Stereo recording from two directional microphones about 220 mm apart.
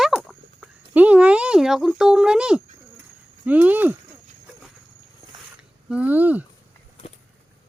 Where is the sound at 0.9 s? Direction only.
5° right (ahead or behind).